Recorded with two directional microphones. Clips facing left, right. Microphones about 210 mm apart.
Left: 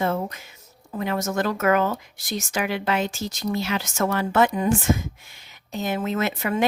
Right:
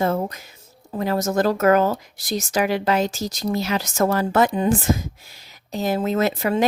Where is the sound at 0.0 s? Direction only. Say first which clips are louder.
Right 3 dB; 40° right (ahead or behind).